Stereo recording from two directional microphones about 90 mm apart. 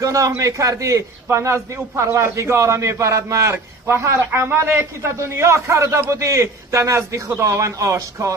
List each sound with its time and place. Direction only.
0.0 s a man's voice: 40° right (ahead or behind)